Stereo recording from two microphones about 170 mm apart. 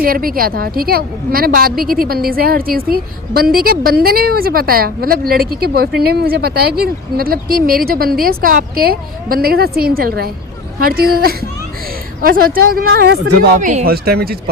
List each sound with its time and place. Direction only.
0.0 s a woman's voice: 60° right (ahead or behind)
13.6 s speech: 50° right (ahead or behind)
13.9 s a woman's voice: 65° right (ahead or behind)